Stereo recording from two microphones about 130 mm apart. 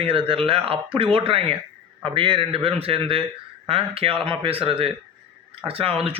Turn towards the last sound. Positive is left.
turn(degrees=-45)  # may be behind; listen again after turning